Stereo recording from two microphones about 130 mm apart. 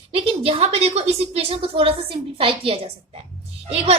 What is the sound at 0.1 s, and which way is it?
A woman's voice, 45° right (ahead or behind).